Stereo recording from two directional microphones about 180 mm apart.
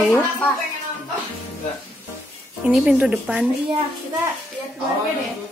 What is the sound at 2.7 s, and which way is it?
Speech, 5° right (ahead or behind).